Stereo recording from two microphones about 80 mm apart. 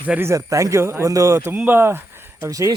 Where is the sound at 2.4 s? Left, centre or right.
Right.